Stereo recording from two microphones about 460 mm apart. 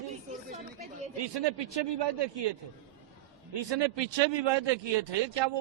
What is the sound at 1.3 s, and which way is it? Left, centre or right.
A man's voice, right.